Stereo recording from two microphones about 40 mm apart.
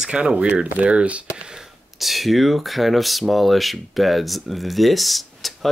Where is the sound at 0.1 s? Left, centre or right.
Right.